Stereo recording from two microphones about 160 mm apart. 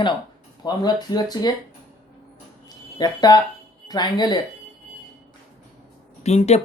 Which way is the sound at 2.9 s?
25° left (ahead or behind).